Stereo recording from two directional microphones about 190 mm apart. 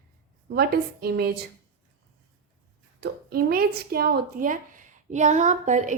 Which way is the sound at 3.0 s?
50° right (ahead or behind).